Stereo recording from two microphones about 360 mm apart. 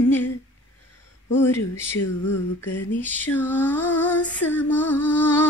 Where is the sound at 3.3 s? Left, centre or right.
Centre.